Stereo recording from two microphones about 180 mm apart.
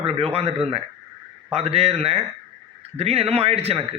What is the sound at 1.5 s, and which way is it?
A man's voice, 35° right (ahead or behind).